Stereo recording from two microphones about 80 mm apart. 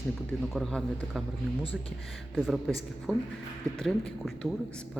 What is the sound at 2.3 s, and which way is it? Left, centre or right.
A man's voice, centre.